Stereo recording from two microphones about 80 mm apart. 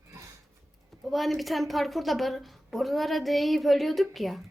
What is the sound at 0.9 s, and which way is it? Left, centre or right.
A woman's voice, centre.